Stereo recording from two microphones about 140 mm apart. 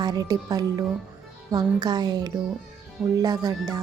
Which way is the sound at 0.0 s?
30° right (ahead or behind).